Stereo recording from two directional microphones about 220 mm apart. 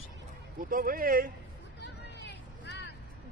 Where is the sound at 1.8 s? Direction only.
50° left (ahead or behind).